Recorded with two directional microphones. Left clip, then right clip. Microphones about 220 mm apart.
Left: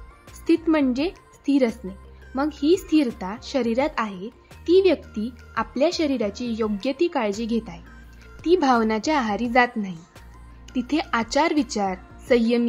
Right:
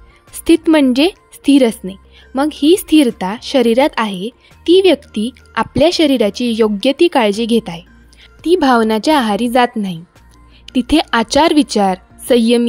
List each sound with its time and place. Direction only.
0.4 s speech: 45° right (ahead or behind)
8.4 s a woman's voice: 35° right (ahead or behind)